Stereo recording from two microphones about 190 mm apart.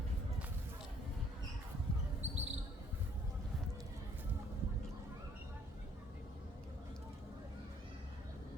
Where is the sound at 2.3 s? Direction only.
35° right (ahead or behind).